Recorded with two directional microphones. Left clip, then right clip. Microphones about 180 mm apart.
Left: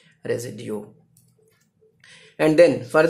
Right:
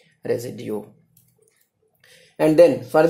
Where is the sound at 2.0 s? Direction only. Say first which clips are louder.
Right 1 dB; 10° right (ahead or behind).